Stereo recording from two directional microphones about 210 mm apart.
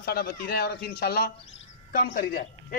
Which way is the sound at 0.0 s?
50° left (ahead or behind).